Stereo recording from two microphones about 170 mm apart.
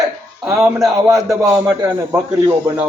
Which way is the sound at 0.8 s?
5° right (ahead or behind).